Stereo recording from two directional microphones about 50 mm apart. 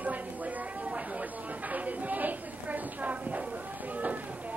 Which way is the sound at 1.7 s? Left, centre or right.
Right.